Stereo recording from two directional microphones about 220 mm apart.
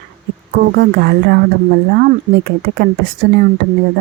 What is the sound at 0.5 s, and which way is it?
Speech, 45° right (ahead or behind).